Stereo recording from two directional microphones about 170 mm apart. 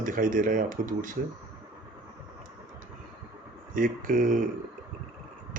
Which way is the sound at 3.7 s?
55° right (ahead or behind).